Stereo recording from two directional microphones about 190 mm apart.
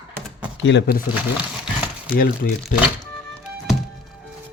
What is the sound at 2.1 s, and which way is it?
Speech, 50° left (ahead or behind).